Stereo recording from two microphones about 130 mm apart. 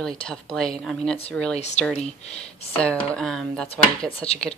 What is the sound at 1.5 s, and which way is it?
Speech, 60° left (ahead or behind).